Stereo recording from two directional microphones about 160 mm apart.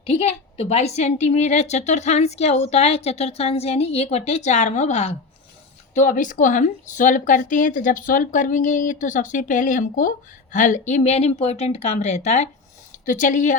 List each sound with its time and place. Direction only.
0.0 s a woman's voice: 40° left (ahead or behind)